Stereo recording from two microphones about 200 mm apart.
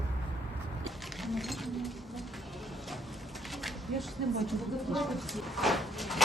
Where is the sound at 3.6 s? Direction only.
Centre (ahead or behind).